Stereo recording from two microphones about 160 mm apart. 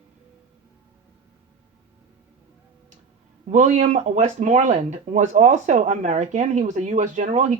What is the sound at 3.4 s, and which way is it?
Speech, 45° right (ahead or behind).